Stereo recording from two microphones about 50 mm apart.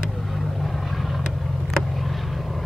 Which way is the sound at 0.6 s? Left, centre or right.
Centre.